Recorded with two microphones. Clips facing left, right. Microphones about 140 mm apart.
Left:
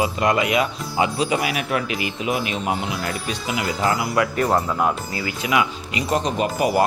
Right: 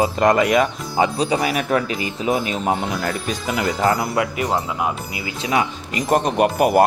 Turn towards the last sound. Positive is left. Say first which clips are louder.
# right 4 dB
turn(degrees=-55)  # may be behind; listen again after turning